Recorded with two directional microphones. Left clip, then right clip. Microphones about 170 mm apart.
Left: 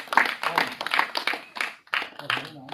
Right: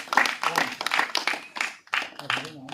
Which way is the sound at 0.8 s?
65° left (ahead or behind).